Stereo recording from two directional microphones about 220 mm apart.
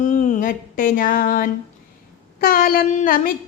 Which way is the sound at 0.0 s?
35° left (ahead or behind).